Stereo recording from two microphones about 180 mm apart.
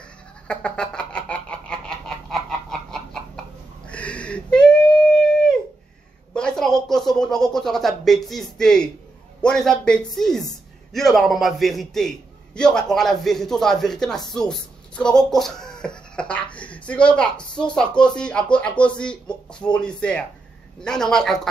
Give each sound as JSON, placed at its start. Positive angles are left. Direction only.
{"t": 0.5, "sound": "chicken", "side_deg": 5}
{"t": 3.8, "sound": "a sound", "side_deg": 5}
{"t": 6.3, "sound": "a man's voice", "side_deg": 5}